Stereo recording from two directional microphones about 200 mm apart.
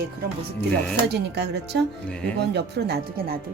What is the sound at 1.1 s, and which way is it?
Speech, 60° right (ahead or behind).